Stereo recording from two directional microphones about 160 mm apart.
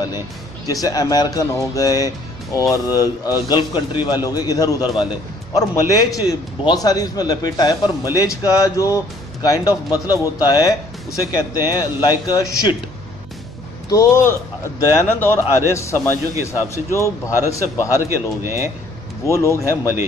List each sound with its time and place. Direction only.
0.7 s a man's voice: 20° left (ahead or behind)
13.8 s a man's voice: 20° left (ahead or behind)
17.9 s speech: 15° right (ahead or behind)
19.2 s a man's voice: 20° left (ahead or behind)